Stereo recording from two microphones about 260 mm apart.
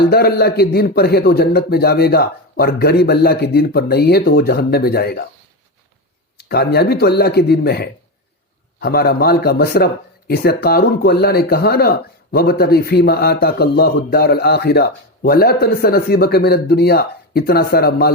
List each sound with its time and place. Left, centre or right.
0.1 s speech: left
6.3 s speech: left